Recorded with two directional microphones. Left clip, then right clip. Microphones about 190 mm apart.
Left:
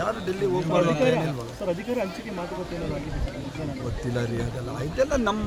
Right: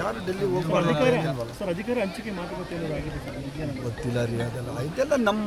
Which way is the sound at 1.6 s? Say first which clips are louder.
Even; 55° right (ahead or behind).